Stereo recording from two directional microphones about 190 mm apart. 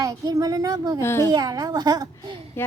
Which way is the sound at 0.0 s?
20° right (ahead or behind).